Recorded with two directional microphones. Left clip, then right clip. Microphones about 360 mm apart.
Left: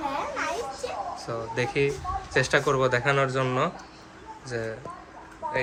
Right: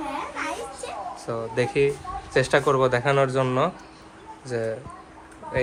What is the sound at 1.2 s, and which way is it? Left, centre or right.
Speech, centre.